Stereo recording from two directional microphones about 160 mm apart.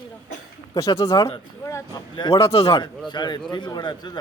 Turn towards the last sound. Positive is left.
turn(degrees=25)  # may be behind; listen again after turning